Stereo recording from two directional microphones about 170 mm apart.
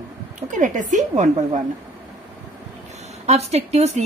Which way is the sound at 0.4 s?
45° right (ahead or behind).